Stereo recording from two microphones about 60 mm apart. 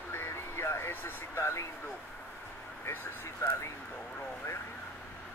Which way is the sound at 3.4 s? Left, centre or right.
Left.